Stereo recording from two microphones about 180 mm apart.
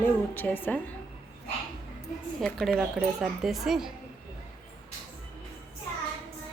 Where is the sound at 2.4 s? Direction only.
Centre (ahead or behind).